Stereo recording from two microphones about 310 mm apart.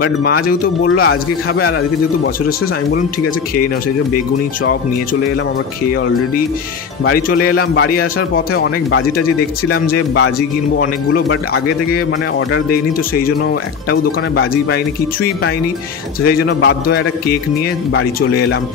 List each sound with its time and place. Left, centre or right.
0.0 s speech: left
7.1 s speech: left
9.8 s speech: left
13.8 s speech: left
16.3 s speech: left